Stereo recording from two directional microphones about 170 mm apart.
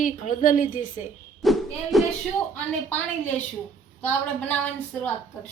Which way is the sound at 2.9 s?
10° left (ahead or behind).